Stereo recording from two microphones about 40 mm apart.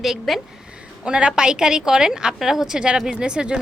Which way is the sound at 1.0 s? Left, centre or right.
Right.